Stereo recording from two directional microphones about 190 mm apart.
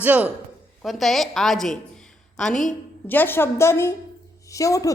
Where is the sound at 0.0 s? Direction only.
10° right (ahead or behind).